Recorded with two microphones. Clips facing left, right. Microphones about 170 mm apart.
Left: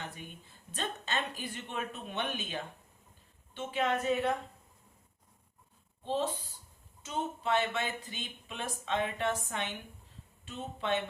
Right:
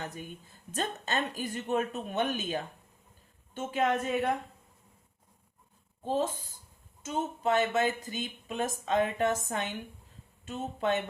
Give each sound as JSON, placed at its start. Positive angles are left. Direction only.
{"t": 0.0, "sound": "a woman's voice", "side_deg": -40}
{"t": 6.0, "sound": "speech", "side_deg": -45}